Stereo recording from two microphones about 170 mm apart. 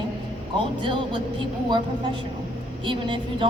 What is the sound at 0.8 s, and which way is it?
Speech, 30° right (ahead or behind).